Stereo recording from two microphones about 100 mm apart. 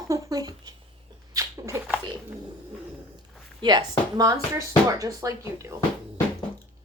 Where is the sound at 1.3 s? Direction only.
35° right (ahead or behind).